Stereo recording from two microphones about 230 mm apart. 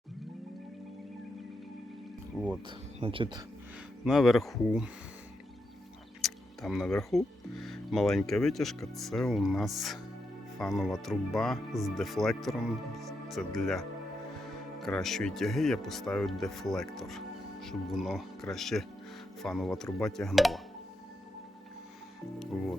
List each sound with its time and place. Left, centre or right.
2.6 s speech: right
4.0 s speech: centre
6.2 s speech: centre
22.4 s speech: centre